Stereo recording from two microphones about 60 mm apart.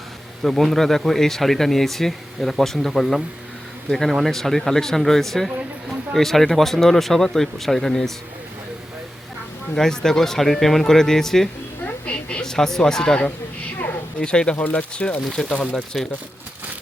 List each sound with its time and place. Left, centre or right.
0.4 s speech: centre
9.7 s speech: centre
12.0 s a sound: centre
12.5 s speech: centre
14.5 s speech: left
15.4 s speech: centre